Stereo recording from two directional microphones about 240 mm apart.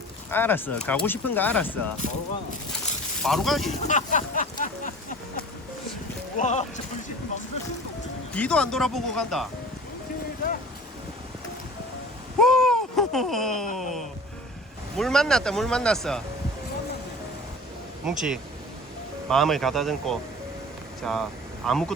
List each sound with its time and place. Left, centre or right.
0.3 s speech: centre
3.2 s speech: centre
3.7 s speech: left
6.3 s speech: left
8.3 s speech: centre
12.4 s a sound: centre
13.7 s speech: centre
18.0 s speech: centre